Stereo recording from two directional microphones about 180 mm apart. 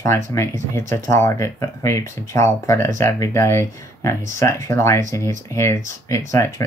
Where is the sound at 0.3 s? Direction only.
15° left (ahead or behind).